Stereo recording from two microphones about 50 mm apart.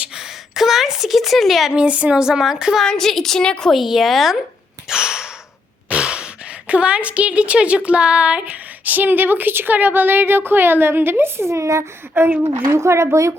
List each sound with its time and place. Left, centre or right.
0.1 s a sound: centre
1.7 s a woman's voice: right
2.2 s a woman's voice: centre
2.8 s a woman's voice: centre
4.9 s a sound: centre
5.9 s a woman's voice: right
12.1 s a woman's voice: right
12.7 s a woman's voice: right